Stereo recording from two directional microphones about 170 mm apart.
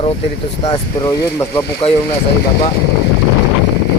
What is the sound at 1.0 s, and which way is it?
Speech, 20° left (ahead or behind).